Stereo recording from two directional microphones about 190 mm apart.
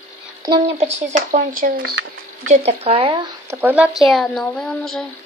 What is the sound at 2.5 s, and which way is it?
Speech, 35° right (ahead or behind).